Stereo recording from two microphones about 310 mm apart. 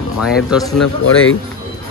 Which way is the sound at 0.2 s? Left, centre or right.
Centre.